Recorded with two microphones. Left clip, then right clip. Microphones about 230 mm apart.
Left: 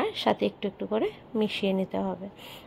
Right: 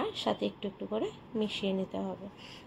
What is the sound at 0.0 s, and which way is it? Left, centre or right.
A woman's voice, left.